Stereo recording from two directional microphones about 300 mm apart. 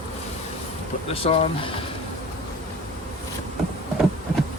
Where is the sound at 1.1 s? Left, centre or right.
Centre.